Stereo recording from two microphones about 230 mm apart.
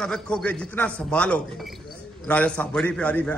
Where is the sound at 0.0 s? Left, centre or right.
Centre.